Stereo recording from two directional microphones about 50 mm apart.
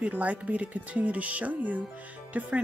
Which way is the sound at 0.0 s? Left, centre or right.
Right.